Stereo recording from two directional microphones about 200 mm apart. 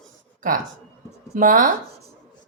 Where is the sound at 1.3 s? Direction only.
40° right (ahead or behind).